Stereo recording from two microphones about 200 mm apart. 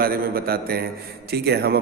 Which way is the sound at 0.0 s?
50° right (ahead or behind).